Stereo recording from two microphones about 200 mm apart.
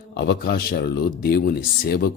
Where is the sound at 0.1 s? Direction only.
55° left (ahead or behind).